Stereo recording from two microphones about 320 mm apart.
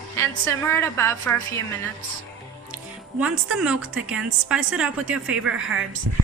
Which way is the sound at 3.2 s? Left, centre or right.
Centre.